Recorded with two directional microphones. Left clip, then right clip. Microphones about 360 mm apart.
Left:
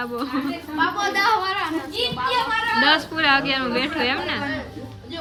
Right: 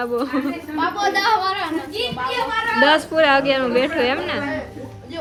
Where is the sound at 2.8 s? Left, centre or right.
Centre.